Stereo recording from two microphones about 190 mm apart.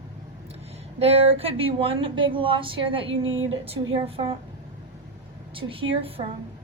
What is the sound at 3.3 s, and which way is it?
Speech, 90° right.